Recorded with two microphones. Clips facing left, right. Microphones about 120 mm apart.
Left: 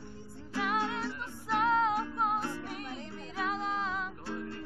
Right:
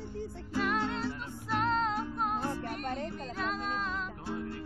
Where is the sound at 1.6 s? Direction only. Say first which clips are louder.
Left 3 dB; 10° left (ahead or behind).